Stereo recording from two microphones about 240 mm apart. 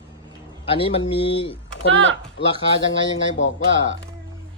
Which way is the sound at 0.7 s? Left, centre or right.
Left.